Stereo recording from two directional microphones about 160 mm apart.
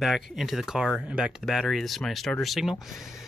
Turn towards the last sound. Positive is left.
turn(degrees=0)  # may be behind; listen again after turning